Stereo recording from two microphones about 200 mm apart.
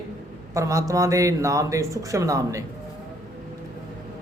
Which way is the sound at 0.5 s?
15° right (ahead or behind).